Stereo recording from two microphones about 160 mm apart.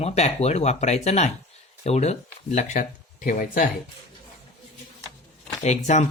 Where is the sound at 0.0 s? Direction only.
40° left (ahead or behind); by 3.7 s 60° left (ahead or behind).